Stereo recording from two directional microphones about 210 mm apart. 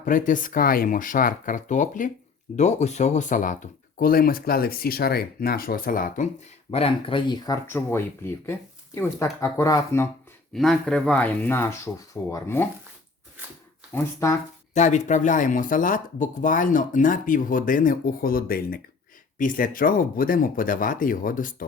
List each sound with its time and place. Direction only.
0.0 s speech: 40° left (ahead or behind)
6.7 s speech: 30° left (ahead or behind)
10.5 s speech: centre (ahead or behind)
13.9 s speech: 15° left (ahead or behind)
14.7 s speech: 35° left (ahead or behind)